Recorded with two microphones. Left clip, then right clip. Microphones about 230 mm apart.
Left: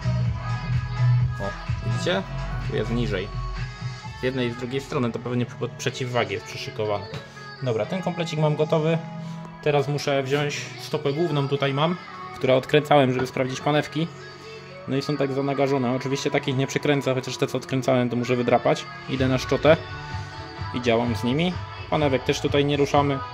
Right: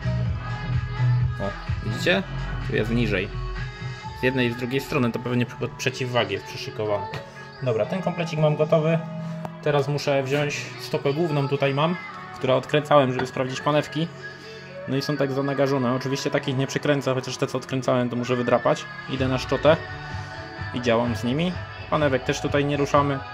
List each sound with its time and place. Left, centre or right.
2.0 s speech: centre
4.7 s speech: centre
12.4 s speech: centre
15.0 s speech: centre